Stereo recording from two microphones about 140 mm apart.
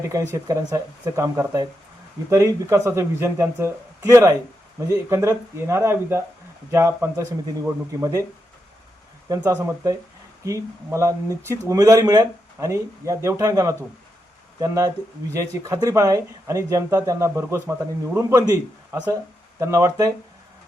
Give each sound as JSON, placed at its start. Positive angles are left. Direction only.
{"t": 0.1, "sound": "speech", "side_deg": -25}
{"t": 9.3, "sound": "speech", "side_deg": -30}